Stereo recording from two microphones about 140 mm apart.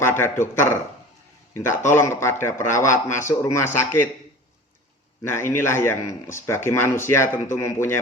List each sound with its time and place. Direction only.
0.0 s a man's voice: 15° left (ahead or behind)
5.3 s speech: 15° left (ahead or behind)